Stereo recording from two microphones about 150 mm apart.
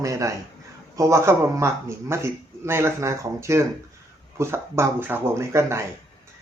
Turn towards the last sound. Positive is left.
turn(degrees=-20)  # may be behind; listen again after turning